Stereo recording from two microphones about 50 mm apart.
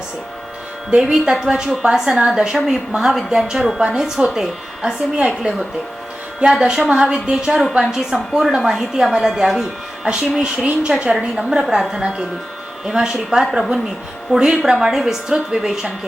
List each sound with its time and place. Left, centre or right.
0.9 s a woman's voice: centre
6.4 s a woman's voice: centre